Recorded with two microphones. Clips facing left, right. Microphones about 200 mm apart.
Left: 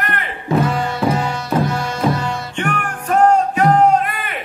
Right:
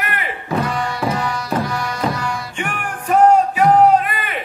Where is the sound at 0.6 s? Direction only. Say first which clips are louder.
Left 2 dB; 25° left (ahead or behind).